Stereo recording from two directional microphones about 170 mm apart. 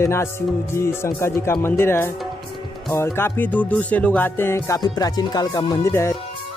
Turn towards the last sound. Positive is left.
turn(degrees=15)  # may be behind; listen again after turning